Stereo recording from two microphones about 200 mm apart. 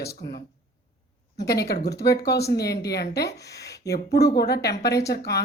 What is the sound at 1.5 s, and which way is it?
Speech, 55° left (ahead or behind).